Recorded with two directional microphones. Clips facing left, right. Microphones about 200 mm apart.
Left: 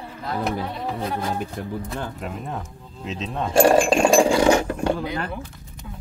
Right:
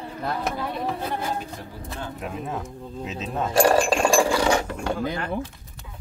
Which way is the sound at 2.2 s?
Centre (ahead or behind).